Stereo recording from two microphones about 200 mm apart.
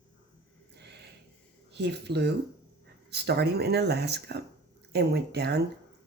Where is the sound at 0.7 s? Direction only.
55° right (ahead or behind).